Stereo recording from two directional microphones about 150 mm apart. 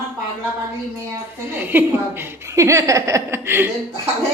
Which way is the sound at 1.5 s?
15° right (ahead or behind).